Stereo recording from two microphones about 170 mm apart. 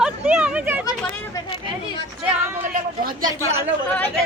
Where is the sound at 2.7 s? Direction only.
55° right (ahead or behind).